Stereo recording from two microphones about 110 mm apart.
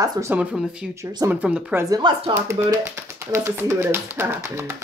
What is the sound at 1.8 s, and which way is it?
Speech, 35° right (ahead or behind).